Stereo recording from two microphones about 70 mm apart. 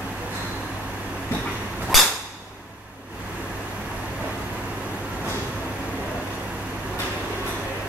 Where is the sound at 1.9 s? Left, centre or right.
Centre.